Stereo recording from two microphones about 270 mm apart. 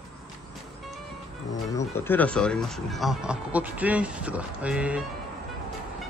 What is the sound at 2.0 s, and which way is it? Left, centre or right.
Speech, centre.